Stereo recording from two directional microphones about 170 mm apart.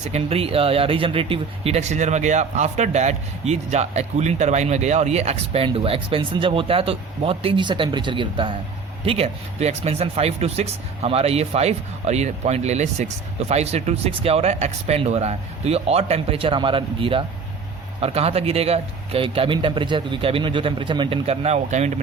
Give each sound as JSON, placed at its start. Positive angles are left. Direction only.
{"t": 0.1, "sound": "speech", "side_deg": -35}